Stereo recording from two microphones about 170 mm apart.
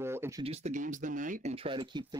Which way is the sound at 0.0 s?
15° right (ahead or behind).